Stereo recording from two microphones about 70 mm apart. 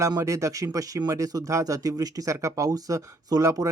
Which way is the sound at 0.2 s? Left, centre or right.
Right.